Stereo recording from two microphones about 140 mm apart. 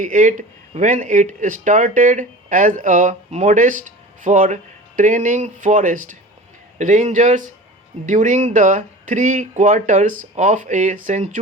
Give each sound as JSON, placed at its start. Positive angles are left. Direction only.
{"t": 0.0, "sound": "speech", "side_deg": -65}